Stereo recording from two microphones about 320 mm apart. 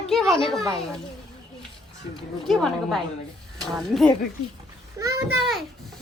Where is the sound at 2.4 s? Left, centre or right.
Centre.